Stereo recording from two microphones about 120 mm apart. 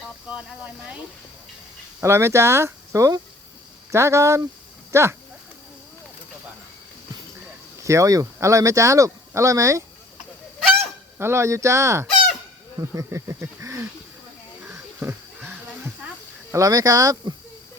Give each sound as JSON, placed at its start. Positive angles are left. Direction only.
{"t": 0.3, "sound": "speech", "side_deg": -10}
{"t": 2.0, "sound": "speech", "side_deg": -20}
{"t": 7.9, "sound": "speech", "side_deg": -25}
{"t": 11.2, "sound": "speech", "side_deg": -20}
{"t": 12.9, "sound": "a sound", "side_deg": -25}
{"t": 16.5, "sound": "speech", "side_deg": -30}